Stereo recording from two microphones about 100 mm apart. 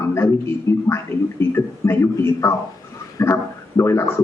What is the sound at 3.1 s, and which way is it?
Speech, 25° left (ahead or behind).